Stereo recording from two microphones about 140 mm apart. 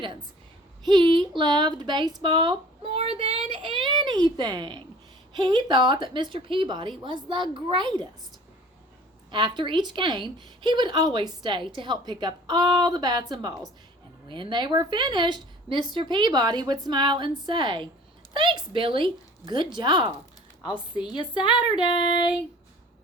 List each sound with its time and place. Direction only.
0.9 s a woman's voice: 35° right (ahead or behind)
3.8 s a woman's voice: 35° right (ahead or behind)
9.3 s a woman's voice: 35° right (ahead or behind)
21.2 s speech: 35° left (ahead or behind)